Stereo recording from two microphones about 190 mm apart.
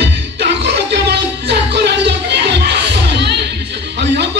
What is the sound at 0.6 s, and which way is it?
Music, 60° right (ahead or behind).